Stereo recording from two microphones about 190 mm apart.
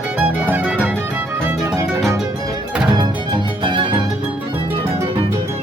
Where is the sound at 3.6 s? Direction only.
25° right (ahead or behind).